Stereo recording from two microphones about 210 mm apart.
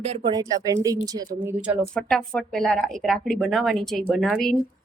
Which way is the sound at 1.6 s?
5° right (ahead or behind).